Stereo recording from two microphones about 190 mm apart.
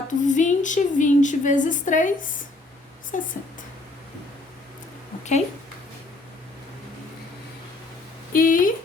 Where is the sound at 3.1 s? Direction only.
40° left (ahead or behind).